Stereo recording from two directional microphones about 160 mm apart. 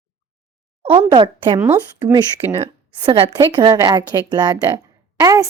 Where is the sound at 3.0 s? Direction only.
30° right (ahead or behind).